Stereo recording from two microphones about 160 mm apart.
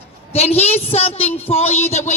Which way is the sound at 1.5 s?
40° left (ahead or behind).